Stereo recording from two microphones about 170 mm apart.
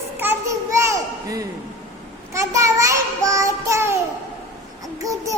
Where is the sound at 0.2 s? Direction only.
15° right (ahead or behind).